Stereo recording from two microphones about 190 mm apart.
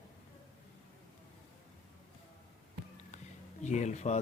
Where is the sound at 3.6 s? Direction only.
40° left (ahead or behind).